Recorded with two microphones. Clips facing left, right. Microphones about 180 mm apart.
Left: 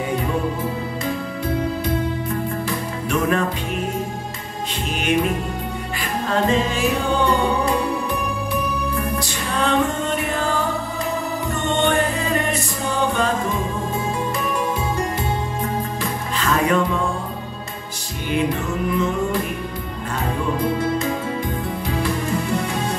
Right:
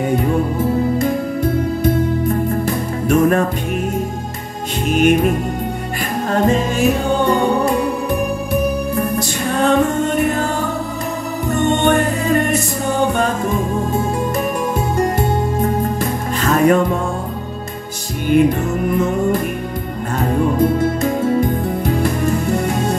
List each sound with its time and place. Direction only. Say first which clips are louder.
2.6 s music: right 6 dB; 45° right (ahead or behind)
4.9 s music: right 7 dB; 45° right (ahead or behind)
6.3 s music: right 4 dB; 45° right (ahead or behind)
9.6 s music: right 5 dB; 50° right (ahead or behind)
11.8 s music: right 4 dB; 50° right (ahead or behind)
15.0 s music: right 7 dB; 45° right (ahead or behind)
18.3 s music: right 8 dB; 45° right (ahead or behind)